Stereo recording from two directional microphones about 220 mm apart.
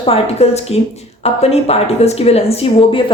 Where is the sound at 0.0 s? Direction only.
25° left (ahead or behind).